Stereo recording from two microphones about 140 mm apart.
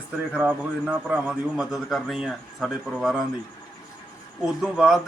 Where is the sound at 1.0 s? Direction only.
5° right (ahead or behind).